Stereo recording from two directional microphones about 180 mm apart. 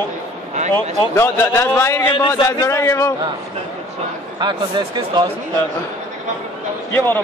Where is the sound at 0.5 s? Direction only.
40° right (ahead or behind).